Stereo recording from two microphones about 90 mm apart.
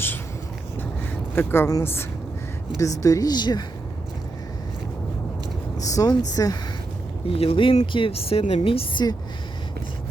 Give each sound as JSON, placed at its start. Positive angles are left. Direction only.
{"t": 1.4, "sound": "a woman's voice", "side_deg": 25}
{"t": 2.7, "sound": "speech", "side_deg": 35}
{"t": 5.7, "sound": "speech", "side_deg": 40}
{"t": 7.3, "sound": "speech", "side_deg": 90}